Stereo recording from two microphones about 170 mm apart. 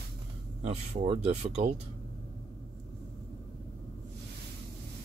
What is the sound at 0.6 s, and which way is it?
Speech, 40° right (ahead or behind).